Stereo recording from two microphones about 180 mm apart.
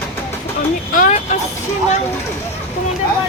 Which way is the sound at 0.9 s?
45° left (ahead or behind).